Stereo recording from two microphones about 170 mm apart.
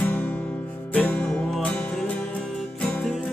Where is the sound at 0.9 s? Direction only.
5° left (ahead or behind).